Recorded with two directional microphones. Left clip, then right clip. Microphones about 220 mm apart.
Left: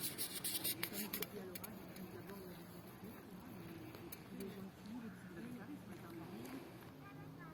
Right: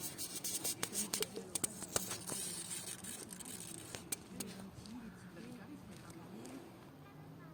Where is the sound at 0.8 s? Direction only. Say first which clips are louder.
Right 5 dB; 40° right (ahead or behind).